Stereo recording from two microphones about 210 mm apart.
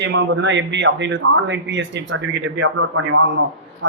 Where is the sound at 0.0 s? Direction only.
60° right (ahead or behind).